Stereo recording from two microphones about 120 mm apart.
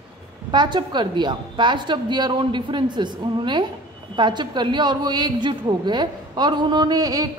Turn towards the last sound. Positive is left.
turn(degrees=-30)  # may be behind; listen again after turning